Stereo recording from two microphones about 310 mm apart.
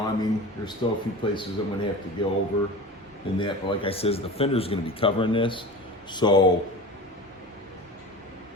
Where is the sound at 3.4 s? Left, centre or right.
Centre.